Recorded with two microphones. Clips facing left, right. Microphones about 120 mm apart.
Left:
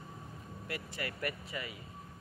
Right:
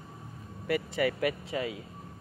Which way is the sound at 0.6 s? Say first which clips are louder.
Right 13 dB; 90° right.